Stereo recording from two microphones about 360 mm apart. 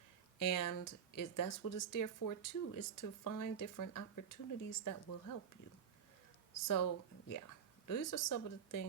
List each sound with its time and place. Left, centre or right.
0.3 s speech: left
6.7 s speech: left